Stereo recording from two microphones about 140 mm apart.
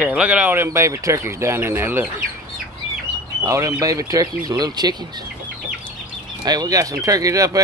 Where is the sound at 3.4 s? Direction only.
25° right (ahead or behind).